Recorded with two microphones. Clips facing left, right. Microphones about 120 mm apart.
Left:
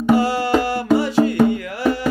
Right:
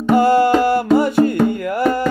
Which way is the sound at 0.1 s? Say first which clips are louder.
Right 4 dB; 50° right (ahead or behind).